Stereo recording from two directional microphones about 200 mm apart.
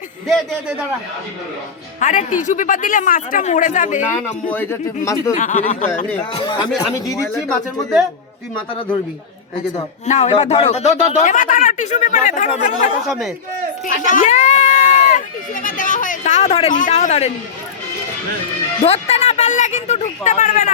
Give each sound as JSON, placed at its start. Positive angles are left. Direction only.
{"t": 2.0, "sound": "a man's voice", "side_deg": 40}
{"t": 4.2, "sound": "speech", "side_deg": 10}
{"t": 5.4, "sound": "a man's voice", "side_deg": 40}
{"t": 6.3, "sound": "speech", "side_deg": 25}
{"t": 10.1, "sound": "a man's voice", "side_deg": 35}
{"t": 13.1, "sound": "a man's voice", "side_deg": 0}
{"t": 13.8, "sound": "a sound", "side_deg": 40}
{"t": 18.8, "sound": "a sound", "side_deg": 30}